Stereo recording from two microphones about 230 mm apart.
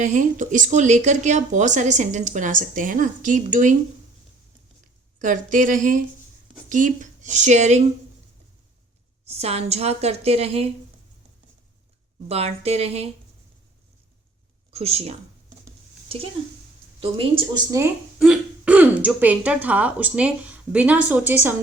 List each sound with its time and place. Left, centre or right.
0.0 s speech: right
5.2 s speech: right
9.2 s a woman's voice: right
12.3 s a woman's voice: right
14.7 s a woman's voice: right
17.0 s speech: right; by 21.5 s centre